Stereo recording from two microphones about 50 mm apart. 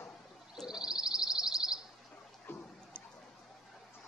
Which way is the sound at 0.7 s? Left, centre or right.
Centre.